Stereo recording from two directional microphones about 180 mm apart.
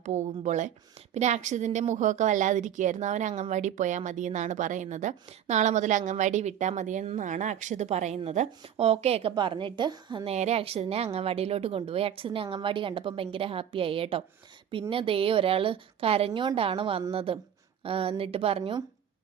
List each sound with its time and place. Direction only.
0.0 s a woman's voice: 40° right (ahead or behind)
10.3 s a woman's voice: 35° right (ahead or behind)